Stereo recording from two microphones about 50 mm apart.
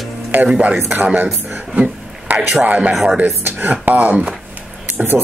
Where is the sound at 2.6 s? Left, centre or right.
Right.